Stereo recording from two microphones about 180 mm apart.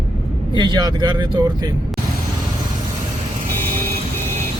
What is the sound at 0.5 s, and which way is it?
Speech, 25° right (ahead or behind).